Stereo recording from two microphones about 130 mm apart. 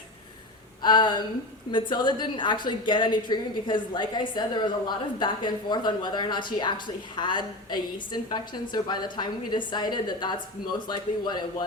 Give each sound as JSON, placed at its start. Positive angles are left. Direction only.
{"t": 0.8, "sound": "a woman's voice", "side_deg": 35}